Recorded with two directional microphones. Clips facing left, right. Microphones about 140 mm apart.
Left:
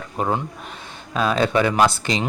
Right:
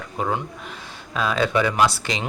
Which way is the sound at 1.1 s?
25° left (ahead or behind).